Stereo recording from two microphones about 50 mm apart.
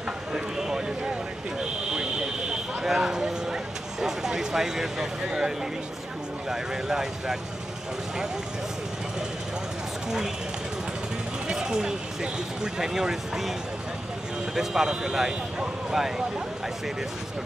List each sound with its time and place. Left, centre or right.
0.3 s a sound: centre
2.8 s vehicle: centre
6.5 s speech: centre
10.0 s speech: centre
11.4 s speech: centre